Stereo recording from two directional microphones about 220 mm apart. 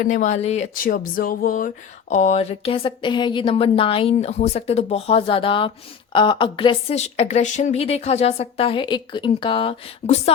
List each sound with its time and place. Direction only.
0.0 s speech: 35° left (ahead or behind)